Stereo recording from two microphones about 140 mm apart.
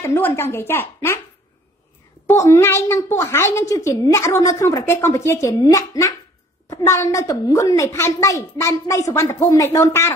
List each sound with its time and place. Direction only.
0.0 s a woman's voice: 20° left (ahead or behind)
2.2 s a woman's voice: 20° left (ahead or behind)